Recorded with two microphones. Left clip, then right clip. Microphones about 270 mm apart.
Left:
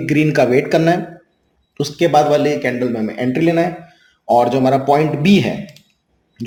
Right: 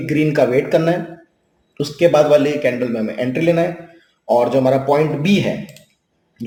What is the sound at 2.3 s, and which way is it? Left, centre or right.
A man's voice, left.